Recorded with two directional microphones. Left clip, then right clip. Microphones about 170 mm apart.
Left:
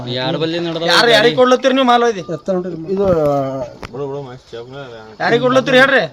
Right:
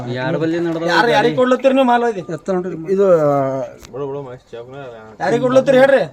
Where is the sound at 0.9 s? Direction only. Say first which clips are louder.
Left 3 dB; 25° right (ahead or behind).